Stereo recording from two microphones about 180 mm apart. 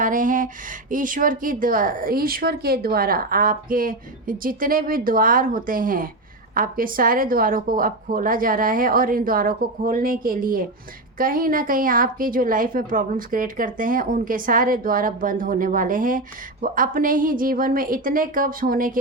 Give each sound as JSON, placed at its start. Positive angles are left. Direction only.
{"t": 0.0, "sound": "a woman's voice", "side_deg": -45}